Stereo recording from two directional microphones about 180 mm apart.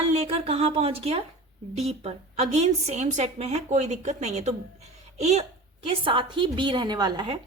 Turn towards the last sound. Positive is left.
turn(degrees=-25)  # may be behind; listen again after turning